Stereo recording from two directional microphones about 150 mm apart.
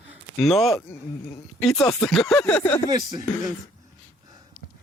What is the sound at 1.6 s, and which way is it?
Speech, 5° left (ahead or behind).